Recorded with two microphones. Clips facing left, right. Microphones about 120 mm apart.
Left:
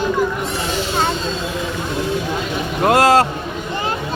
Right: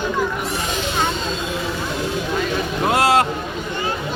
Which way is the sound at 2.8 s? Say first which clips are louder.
Left 4 dB; 45° left (ahead or behind).